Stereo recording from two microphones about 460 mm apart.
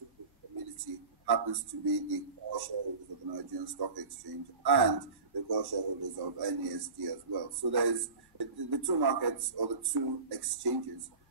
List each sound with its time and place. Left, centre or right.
1.2 s speech: right